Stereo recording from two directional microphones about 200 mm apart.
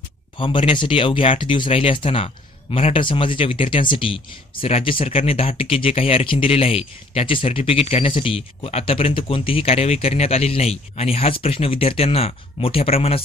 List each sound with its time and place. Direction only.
0.4 s speech: 25° left (ahead or behind)